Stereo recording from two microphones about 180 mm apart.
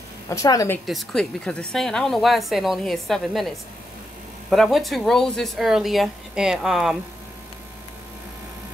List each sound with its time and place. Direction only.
0.3 s a woman's voice: 20° left (ahead or behind)
0.8 s a woman's voice: centre (ahead or behind)